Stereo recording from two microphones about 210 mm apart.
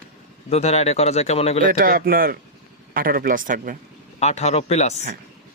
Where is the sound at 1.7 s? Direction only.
45° right (ahead or behind).